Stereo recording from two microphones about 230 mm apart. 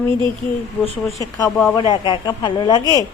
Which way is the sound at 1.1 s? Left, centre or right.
Centre.